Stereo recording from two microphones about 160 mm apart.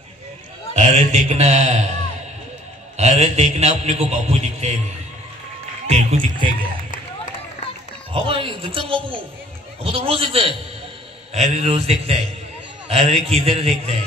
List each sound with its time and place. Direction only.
0.7 s a man's voice: 45° right (ahead or behind)
5.9 s music: 45° right (ahead or behind)
8.1 s a man's voice: 35° right (ahead or behind)
11.5 s a man's voice: 40° right (ahead or behind)